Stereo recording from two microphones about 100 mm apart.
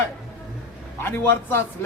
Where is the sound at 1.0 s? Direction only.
20° left (ahead or behind).